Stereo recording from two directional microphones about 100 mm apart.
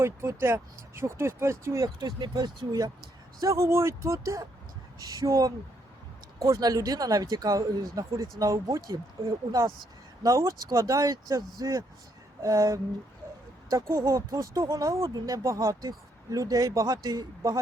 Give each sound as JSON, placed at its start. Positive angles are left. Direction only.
{"t": 0.0, "sound": "speech", "side_deg": -25}
{"t": 2.0, "sound": "speech", "side_deg": -45}
{"t": 3.4, "sound": "speech", "side_deg": -30}